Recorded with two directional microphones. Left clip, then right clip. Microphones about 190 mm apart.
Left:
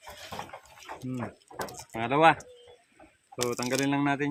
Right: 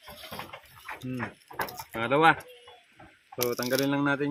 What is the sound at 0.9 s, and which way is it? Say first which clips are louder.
Dog: right 2 dB; 40° left (ahead or behind).